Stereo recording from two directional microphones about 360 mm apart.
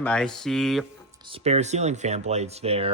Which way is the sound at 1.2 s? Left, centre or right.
Centre.